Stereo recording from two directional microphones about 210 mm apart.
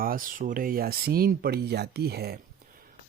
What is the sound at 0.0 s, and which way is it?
Speech, 45° right (ahead or behind).